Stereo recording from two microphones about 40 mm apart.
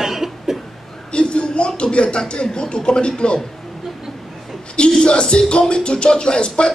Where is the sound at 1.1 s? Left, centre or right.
Left.